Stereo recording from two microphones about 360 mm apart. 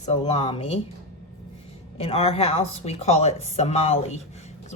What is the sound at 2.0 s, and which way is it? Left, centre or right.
Speech, centre.